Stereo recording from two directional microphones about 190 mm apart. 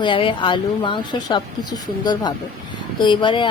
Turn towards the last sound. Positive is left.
turn(degrees=25)  # may be behind; listen again after turning